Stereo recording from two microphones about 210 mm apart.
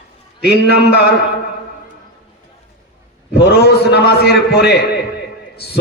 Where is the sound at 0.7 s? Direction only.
50° left (ahead or behind).